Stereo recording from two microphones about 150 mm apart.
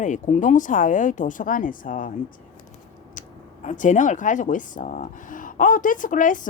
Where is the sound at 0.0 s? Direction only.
55° left (ahead or behind).